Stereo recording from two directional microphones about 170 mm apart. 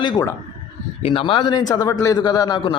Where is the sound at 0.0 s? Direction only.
20° left (ahead or behind).